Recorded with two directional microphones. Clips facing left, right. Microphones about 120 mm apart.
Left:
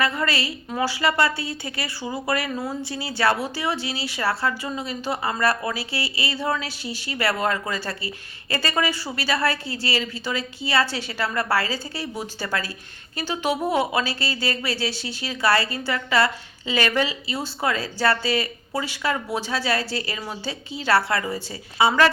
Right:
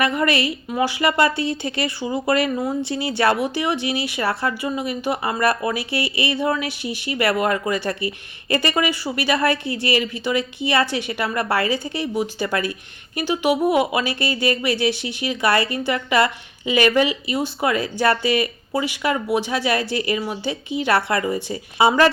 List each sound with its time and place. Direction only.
0.0 s speech: 20° right (ahead or behind)